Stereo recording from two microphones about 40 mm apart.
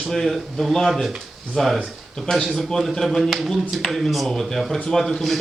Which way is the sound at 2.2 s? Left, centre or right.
Centre.